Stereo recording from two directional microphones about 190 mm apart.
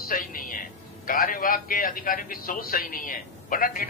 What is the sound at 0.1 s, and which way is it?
A man's voice, 45° left (ahead or behind).